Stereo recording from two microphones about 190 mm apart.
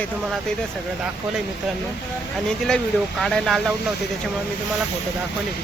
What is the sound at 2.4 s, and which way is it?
Speech, 5° left (ahead or behind).